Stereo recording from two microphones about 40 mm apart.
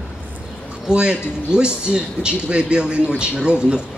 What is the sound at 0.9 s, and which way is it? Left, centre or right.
Speech, right.